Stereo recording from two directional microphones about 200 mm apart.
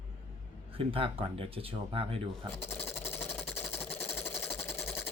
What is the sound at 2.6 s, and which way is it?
Sewing machine, 10° left (ahead or behind).